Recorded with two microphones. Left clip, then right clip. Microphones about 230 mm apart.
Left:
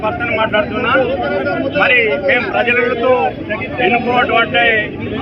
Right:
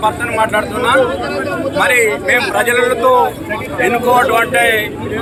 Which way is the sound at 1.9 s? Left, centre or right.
Right.